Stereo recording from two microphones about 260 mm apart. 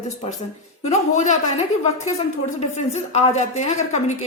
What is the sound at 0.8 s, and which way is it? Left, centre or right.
A woman's voice, left.